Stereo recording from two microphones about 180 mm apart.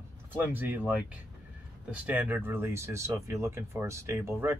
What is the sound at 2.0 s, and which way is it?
Speech, 10° right (ahead or behind).